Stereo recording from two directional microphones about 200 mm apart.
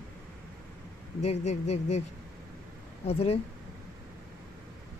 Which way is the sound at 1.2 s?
35° left (ahead or behind).